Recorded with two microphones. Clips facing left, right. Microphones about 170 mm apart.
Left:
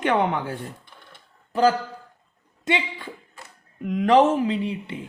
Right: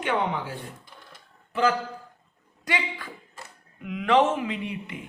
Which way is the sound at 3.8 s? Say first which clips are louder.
Left 4 dB; 40° left (ahead or behind).